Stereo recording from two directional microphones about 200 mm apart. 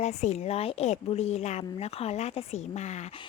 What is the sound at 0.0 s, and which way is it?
A woman's voice, 35° left (ahead or behind).